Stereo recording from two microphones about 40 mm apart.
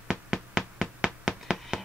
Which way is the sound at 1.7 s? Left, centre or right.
Right.